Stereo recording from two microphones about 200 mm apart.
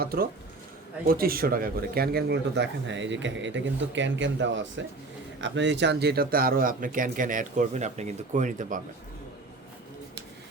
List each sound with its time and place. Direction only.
0.0 s speech: 50° right (ahead or behind)